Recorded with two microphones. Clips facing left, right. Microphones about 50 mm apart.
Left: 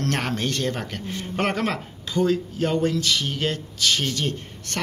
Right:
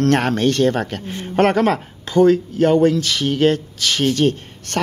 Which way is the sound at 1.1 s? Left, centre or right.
Right.